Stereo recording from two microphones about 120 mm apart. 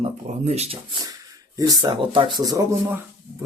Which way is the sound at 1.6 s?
35° right (ahead or behind).